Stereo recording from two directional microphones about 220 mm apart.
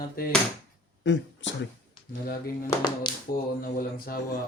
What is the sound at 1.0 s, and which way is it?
Speech, 55° left (ahead or behind).